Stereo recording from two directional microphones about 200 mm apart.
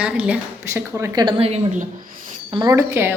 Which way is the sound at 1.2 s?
30° right (ahead or behind).